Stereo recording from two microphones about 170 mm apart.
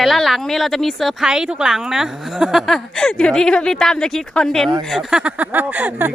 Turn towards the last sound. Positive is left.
turn(degrees=-10)  # may be behind; listen again after turning